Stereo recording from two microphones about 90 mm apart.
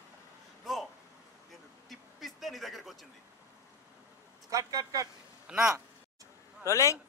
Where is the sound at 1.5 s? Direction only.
Centre (ahead or behind).